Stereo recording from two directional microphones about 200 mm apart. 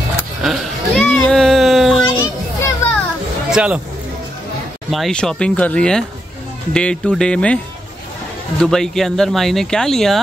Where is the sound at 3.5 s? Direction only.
5° right (ahead or behind).